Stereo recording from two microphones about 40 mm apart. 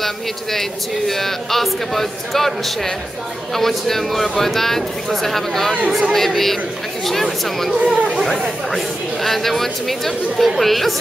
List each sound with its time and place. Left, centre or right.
0.0 s speech: centre
7.8 s speech: right
8.7 s speech: centre